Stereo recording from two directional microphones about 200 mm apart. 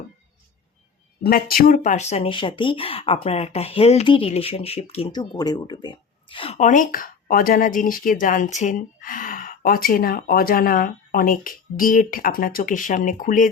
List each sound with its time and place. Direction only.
1.2 s speech: 50° left (ahead or behind)